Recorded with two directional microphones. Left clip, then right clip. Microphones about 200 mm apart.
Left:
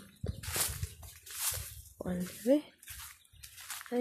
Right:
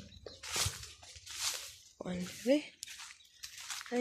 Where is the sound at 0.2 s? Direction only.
Centre (ahead or behind).